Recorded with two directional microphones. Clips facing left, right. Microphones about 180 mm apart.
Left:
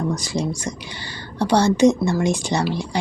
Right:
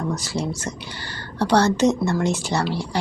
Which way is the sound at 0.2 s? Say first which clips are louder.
Left 2 dB; 15° left (ahead or behind).